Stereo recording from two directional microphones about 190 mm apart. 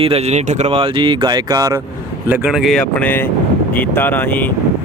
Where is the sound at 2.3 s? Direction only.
5° right (ahead or behind).